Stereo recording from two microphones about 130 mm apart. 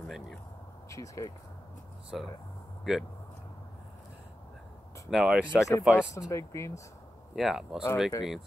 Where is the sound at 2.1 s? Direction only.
Centre (ahead or behind).